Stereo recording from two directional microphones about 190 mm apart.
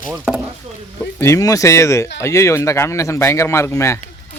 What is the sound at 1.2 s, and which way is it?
Speech, 15° left (ahead or behind).